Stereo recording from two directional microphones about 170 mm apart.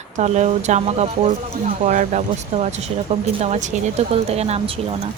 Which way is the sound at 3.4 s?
40° right (ahead or behind).